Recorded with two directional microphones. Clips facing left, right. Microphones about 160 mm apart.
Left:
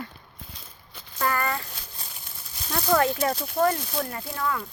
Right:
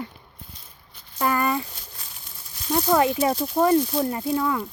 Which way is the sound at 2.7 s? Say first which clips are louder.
Right 3 dB; 15° right (ahead or behind).